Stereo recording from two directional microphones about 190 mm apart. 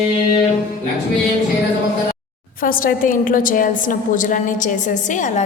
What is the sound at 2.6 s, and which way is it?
A woman's voice, 50° left (ahead or behind).